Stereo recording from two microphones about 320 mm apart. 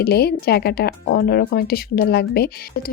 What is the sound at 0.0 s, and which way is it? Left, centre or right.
Speech, left.